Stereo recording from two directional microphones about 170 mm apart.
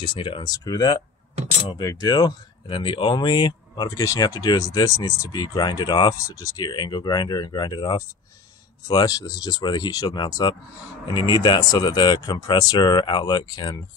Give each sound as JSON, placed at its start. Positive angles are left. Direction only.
{"t": 0.0, "sound": "speech", "side_deg": 30}